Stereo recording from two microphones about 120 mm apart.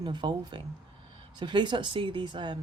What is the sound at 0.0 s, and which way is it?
Speech, 40° right (ahead or behind).